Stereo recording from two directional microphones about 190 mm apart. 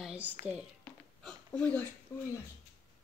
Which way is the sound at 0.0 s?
5° right (ahead or behind).